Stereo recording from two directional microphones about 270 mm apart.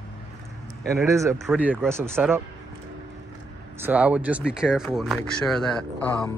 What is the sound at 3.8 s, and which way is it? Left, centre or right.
Speech, centre.